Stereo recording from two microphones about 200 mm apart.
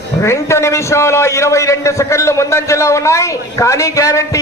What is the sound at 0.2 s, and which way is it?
A man's voice, 15° left (ahead or behind).